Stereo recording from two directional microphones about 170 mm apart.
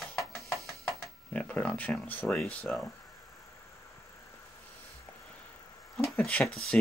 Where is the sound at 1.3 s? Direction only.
5° left (ahead or behind).